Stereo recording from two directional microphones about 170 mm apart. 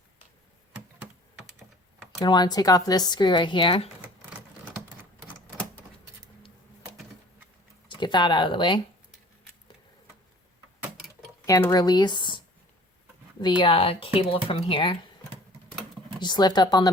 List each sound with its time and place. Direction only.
2.2 s speech: 25° left (ahead or behind)
7.9 s speech: 25° left (ahead or behind)
11.4 s speech: 20° left (ahead or behind)
13.4 s speech: 30° left (ahead or behind)
16.2 s speech: 25° left (ahead or behind)